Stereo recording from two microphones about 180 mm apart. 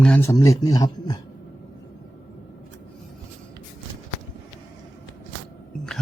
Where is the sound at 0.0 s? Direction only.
10° left (ahead or behind).